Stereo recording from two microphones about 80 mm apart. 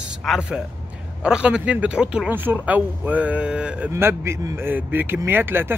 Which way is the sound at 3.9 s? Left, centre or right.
Right.